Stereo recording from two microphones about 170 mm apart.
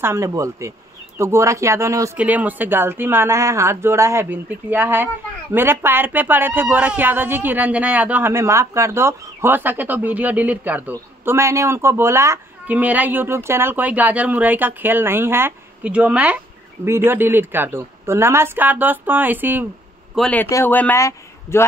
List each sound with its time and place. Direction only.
0.0 s speech: 15° right (ahead or behind)
20.2 s a man's voice: 5° left (ahead or behind)